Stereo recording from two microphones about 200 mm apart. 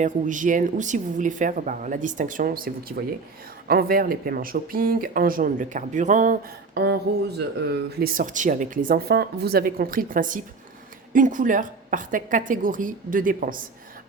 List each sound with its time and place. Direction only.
0.0 s speech: 40° right (ahead or behind)
6.7 s speech: 55° right (ahead or behind)